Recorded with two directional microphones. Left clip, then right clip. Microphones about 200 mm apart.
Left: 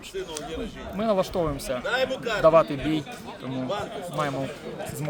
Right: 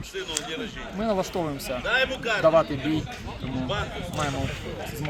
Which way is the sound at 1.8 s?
60° left (ahead or behind).